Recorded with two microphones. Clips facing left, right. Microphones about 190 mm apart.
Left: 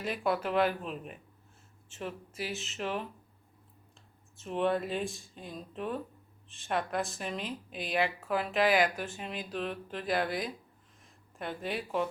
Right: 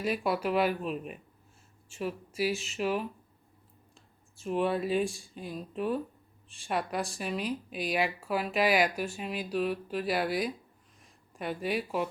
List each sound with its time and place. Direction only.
0.2 s speech: 10° right (ahead or behind)
4.4 s speech: 10° right (ahead or behind)
7.4 s speech: 25° left (ahead or behind)
7.9 s speech: 10° right (ahead or behind)
10.2 s speech: 20° left (ahead or behind)
11.3 s speech: 10° right (ahead or behind)